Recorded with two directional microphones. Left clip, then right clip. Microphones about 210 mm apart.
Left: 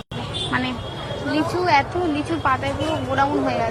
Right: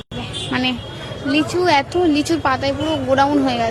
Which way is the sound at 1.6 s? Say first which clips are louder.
Right 3 dB; 45° right (ahead or behind).